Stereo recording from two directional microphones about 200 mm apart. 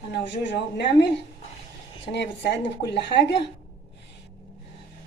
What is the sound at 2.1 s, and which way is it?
Speech, 60° left (ahead or behind).